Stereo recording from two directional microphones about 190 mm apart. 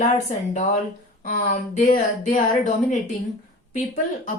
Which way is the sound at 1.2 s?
50° left (ahead or behind).